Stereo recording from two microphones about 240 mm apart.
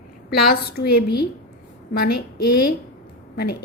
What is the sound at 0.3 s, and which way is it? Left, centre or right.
Speech, left.